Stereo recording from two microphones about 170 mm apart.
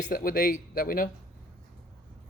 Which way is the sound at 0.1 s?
60° left (ahead or behind).